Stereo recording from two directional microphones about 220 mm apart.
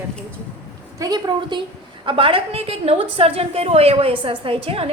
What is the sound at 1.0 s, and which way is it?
A woman's voice, 15° right (ahead or behind).